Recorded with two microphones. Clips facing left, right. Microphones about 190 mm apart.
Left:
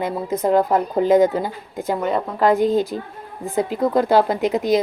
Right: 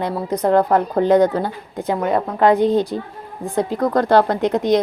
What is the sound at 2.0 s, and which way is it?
Speech, 50° right (ahead or behind).